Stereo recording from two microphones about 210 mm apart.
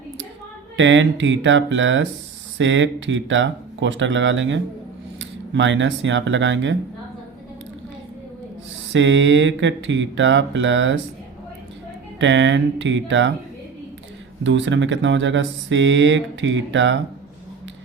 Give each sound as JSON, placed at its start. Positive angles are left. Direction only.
{"t": 0.8, "sound": "speech", "side_deg": -60}
{"t": 8.9, "sound": "speech", "side_deg": -60}
{"t": 12.2, "sound": "speech", "side_deg": -60}
{"t": 14.4, "sound": "speech", "side_deg": -60}